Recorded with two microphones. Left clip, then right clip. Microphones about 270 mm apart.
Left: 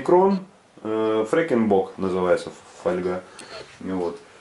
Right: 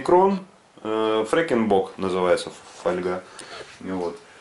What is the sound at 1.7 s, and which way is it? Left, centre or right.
Speech, left.